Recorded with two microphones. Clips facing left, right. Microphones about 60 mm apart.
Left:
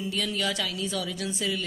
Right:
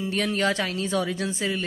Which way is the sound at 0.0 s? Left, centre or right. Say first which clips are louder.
Right 5 dB; right.